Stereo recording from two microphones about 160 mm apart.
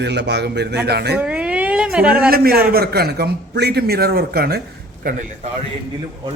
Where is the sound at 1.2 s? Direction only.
5° right (ahead or behind).